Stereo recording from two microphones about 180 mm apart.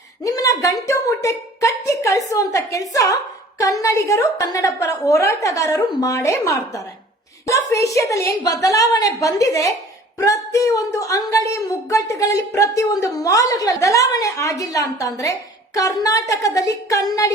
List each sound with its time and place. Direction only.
0.3 s a woman's voice: 20° left (ahead or behind)